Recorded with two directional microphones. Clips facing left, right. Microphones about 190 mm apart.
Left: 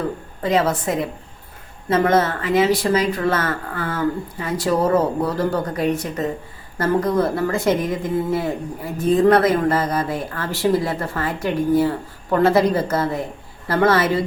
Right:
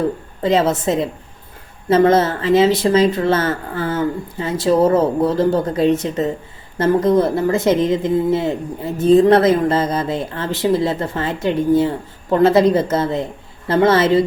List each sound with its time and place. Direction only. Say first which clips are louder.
0.4 s a woman's voice: right 3 dB; 25° right (ahead or behind)